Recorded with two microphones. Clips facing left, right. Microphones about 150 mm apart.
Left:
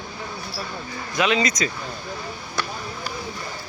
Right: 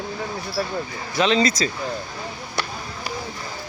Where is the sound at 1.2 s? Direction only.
30° right (ahead or behind).